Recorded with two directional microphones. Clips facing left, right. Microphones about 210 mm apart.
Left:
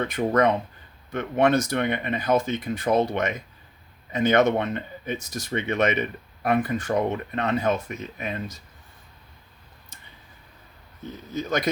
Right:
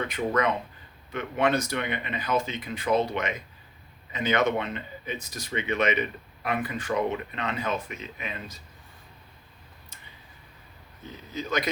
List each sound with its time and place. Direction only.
0.1 s speech: 45° left (ahead or behind)
11.3 s speech: 45° left (ahead or behind)